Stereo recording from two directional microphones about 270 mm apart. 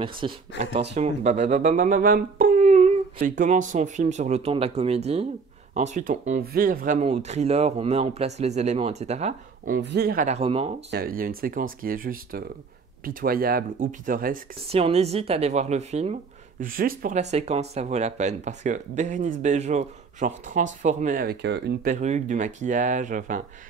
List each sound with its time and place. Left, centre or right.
0.2 s speech: centre
9.8 s speech: right
10.9 s speech: right